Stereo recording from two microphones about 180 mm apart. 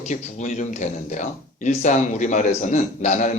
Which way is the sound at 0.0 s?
40° left (ahead or behind).